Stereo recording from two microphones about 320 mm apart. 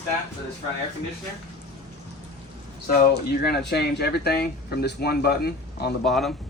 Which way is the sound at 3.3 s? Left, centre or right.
Left.